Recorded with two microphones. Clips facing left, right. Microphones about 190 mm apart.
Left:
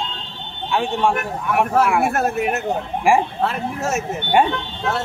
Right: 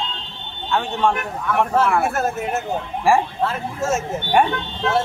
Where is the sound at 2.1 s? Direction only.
65° left (ahead or behind).